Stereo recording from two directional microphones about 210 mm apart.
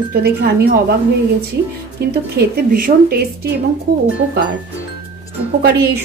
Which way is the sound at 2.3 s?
45° right (ahead or behind).